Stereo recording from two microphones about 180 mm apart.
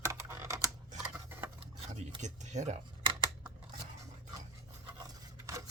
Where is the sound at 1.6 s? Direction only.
35° right (ahead or behind).